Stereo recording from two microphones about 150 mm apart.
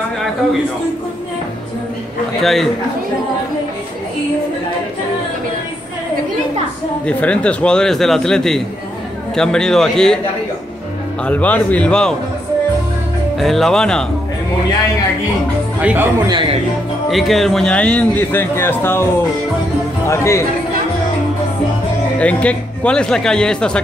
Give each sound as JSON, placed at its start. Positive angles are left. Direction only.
{"t": 2.4, "sound": "speech", "side_deg": 0}
{"t": 7.1, "sound": "speech", "side_deg": 10}
{"t": 11.2, "sound": "a man's voice", "side_deg": 10}
{"t": 13.4, "sound": "speech", "side_deg": 0}
{"t": 15.8, "sound": "speech", "side_deg": -10}
{"t": 17.1, "sound": "a man's voice", "side_deg": 0}
{"t": 20.1, "sound": "speech", "side_deg": 20}
{"t": 22.2, "sound": "speech", "side_deg": 10}